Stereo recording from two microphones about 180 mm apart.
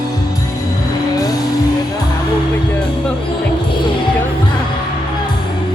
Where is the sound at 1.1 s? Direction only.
20° left (ahead or behind).